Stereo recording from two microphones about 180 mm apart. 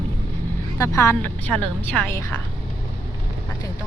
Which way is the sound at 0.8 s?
15° left (ahead or behind).